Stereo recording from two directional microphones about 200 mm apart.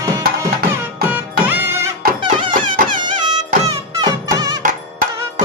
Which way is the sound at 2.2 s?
25° right (ahead or behind).